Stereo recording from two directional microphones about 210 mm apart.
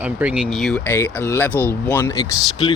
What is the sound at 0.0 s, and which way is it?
Speech, 5° right (ahead or behind).